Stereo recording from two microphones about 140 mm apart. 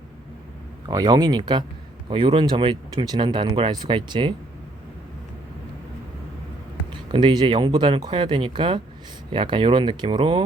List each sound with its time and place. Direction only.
0.9 s speech: 30° right (ahead or behind)
7.1 s speech: 35° right (ahead or behind)